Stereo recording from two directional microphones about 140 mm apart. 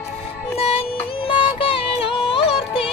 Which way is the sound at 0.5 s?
45° left (ahead or behind).